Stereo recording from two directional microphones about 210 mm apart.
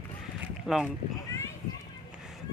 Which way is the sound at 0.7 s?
5° right (ahead or behind).